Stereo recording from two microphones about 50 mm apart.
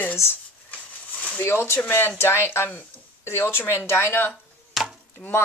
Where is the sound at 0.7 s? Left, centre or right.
Left.